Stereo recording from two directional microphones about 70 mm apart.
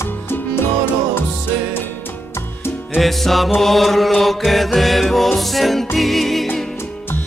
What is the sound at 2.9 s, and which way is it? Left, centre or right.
Music, centre.